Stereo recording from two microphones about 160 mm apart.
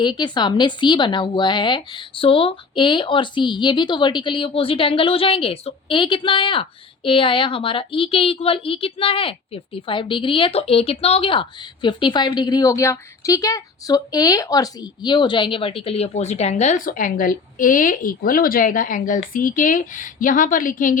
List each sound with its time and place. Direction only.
0.0 s a woman's voice: 30° left (ahead or behind); by 21.0 s 55° left (ahead or behind)